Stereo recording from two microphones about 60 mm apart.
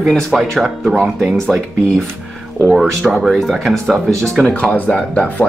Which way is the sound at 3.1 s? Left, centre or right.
Centre.